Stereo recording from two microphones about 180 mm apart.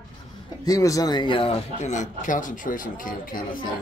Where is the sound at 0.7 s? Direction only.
20° left (ahead or behind); by 3.4 s 50° left (ahead or behind).